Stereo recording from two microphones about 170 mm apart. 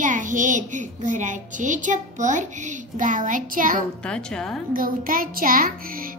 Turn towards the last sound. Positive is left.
turn(degrees=-55)  # may be behind; listen again after turning